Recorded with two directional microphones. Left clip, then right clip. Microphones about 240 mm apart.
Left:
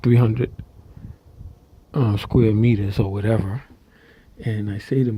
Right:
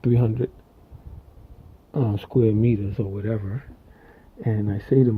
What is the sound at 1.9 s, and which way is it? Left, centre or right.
Speech, left.